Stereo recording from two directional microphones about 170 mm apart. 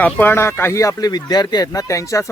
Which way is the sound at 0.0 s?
10° left (ahead or behind).